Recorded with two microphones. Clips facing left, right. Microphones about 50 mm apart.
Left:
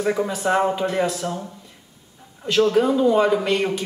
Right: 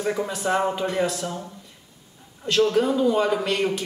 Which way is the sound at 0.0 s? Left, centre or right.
Centre.